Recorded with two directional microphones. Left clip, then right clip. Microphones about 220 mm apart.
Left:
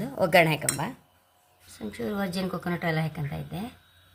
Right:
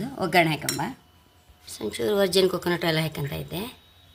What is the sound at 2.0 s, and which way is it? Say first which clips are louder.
Speech: right 11 dB; 35° right (ahead or behind).